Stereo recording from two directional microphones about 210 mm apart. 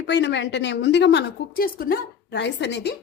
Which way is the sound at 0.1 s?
55° left (ahead or behind).